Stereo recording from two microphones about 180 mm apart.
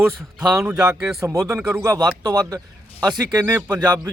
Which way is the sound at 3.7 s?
25° right (ahead or behind).